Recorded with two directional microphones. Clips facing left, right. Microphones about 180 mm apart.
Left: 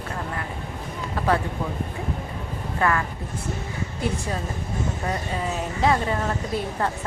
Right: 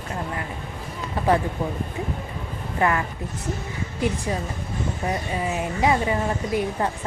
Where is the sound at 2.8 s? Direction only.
15° right (ahead or behind).